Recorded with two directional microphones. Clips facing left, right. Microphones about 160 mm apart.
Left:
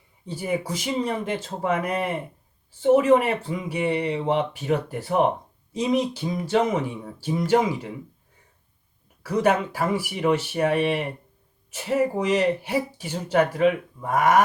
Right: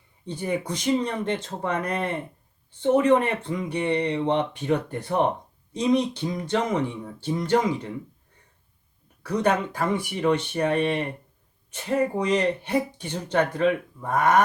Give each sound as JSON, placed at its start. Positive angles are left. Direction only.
{"t": 0.3, "sound": "speech", "side_deg": 5}
{"t": 9.2, "sound": "speech", "side_deg": 10}